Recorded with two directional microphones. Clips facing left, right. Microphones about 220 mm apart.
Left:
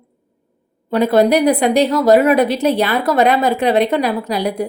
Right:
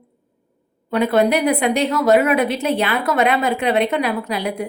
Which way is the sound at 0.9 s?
35° left (ahead or behind).